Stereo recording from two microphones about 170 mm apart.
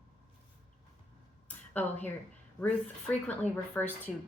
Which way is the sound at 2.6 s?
5° left (ahead or behind).